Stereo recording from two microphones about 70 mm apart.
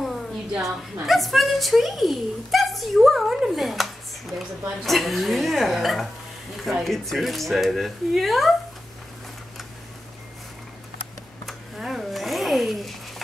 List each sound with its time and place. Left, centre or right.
0.0 s music: centre
1.0 s speech: centre
11.4 s a sound: centre